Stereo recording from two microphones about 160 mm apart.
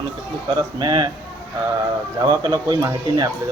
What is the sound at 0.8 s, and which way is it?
Speech, 25° right (ahead or behind).